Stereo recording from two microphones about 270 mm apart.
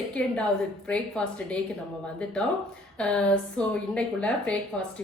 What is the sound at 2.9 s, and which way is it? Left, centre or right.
A woman's voice, centre.